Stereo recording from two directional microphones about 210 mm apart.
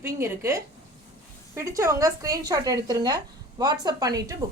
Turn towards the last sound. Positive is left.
turn(degrees=-15)  # may be behind; listen again after turning